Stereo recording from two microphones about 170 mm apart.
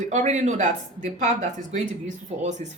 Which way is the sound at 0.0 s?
45° right (ahead or behind).